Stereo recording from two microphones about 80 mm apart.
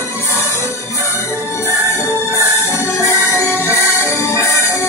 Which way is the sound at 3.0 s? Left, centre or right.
Left.